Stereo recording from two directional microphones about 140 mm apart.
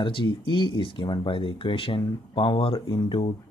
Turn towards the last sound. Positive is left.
turn(degrees=35)  # may be behind; listen again after turning